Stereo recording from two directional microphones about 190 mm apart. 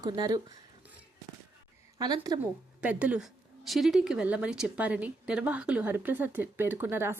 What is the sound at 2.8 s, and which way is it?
Speech, 5° right (ahead or behind).